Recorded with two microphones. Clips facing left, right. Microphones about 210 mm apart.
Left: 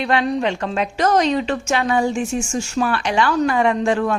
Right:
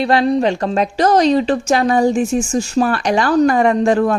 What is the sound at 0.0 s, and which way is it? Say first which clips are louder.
A woman's voice: right 5 dB; 35° right (ahead or behind).